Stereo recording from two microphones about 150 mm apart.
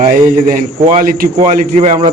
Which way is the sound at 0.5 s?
70° right (ahead or behind).